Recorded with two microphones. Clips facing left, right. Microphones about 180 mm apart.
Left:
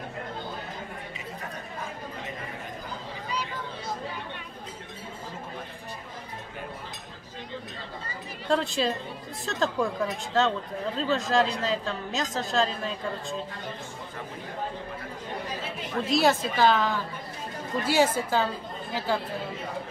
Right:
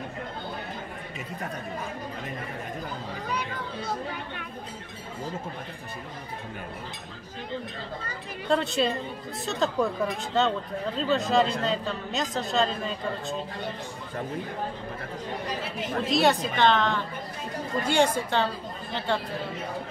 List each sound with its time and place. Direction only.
8.5 s a woman's voice: centre (ahead or behind)
16.1 s a woman's voice: centre (ahead or behind)